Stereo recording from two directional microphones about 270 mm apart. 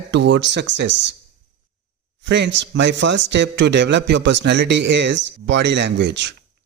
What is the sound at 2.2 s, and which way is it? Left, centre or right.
A man's voice, right.